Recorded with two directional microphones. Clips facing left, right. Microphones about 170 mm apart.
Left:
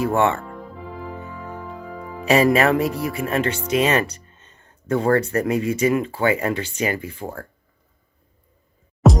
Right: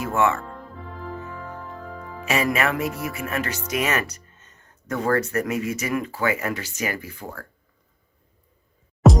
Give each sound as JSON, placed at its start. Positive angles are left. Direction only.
{"t": 0.0, "sound": "speech", "side_deg": 30}
{"t": 0.4, "sound": "music", "side_deg": 10}
{"t": 2.2, "sound": "speech", "side_deg": 35}
{"t": 9.0, "sound": "music", "side_deg": 0}